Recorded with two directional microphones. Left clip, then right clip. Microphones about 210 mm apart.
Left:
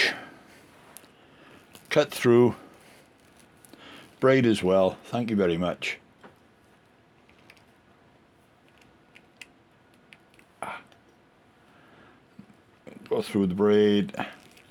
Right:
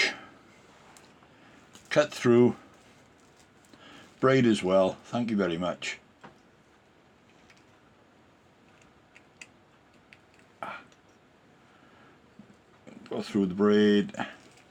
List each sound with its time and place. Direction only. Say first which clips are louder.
0.0 s a sound: left 3 dB; 60° left (ahead or behind)
1.9 s speech: left 2 dB; 60° left (ahead or behind)
3.8 s speech: left 2 dB; 60° left (ahead or behind)
12.8 s speech: left 8 dB; 55° left (ahead or behind)